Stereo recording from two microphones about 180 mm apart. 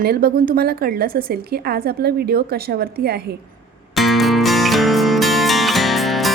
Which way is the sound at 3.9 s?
Centre (ahead or behind).